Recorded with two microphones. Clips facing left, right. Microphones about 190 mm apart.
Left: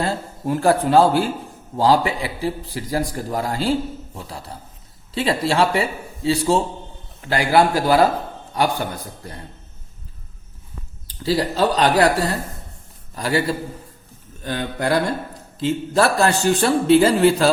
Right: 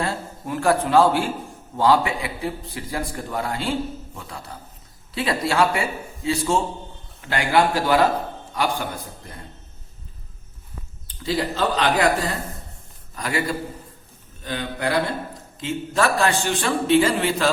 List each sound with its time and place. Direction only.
0.0 s a man's voice: 35° left (ahead or behind)
11.3 s a man's voice: 35° left (ahead or behind)
13.1 s a man's voice: 30° left (ahead or behind)